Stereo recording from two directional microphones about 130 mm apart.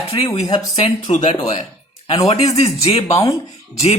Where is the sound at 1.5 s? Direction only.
45° left (ahead or behind).